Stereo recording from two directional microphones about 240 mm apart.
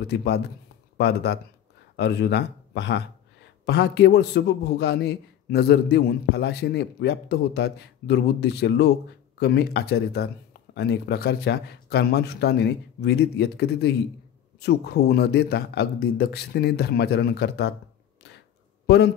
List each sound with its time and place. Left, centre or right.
0.0 s a man's voice: left